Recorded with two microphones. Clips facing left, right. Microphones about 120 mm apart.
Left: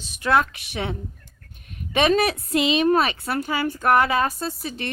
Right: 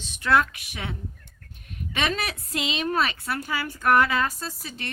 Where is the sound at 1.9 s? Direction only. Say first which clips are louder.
Left 9 dB; 20° left (ahead or behind).